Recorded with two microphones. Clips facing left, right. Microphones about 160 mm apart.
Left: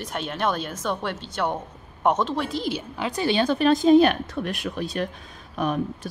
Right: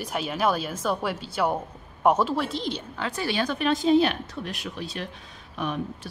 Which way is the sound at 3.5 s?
40° left (ahead or behind).